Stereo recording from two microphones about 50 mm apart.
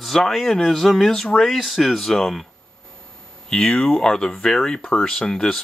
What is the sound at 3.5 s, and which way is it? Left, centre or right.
Speech, centre.